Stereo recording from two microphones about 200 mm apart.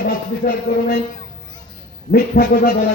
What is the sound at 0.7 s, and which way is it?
Speech, 40° left (ahead or behind).